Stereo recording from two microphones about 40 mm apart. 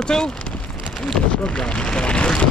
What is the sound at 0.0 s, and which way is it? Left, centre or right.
Speech, centre.